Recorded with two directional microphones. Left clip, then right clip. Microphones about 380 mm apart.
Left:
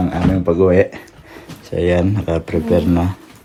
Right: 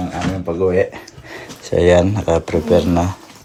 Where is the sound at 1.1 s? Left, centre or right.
Right.